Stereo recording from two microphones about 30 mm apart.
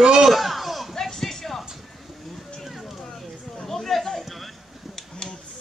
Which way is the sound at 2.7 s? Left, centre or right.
Centre.